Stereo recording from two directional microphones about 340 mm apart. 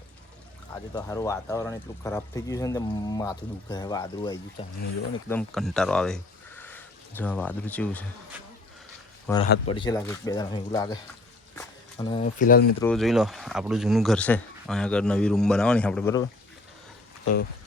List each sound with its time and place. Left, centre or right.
0.9 s speech: centre
5.3 s speech: centre; by 12.6 s left
12.8 s speech: centre